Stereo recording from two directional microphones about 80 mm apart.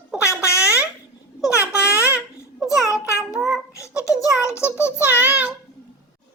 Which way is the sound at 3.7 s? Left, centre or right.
Left.